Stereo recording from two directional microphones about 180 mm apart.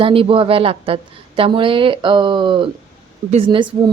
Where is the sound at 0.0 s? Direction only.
30° right (ahead or behind).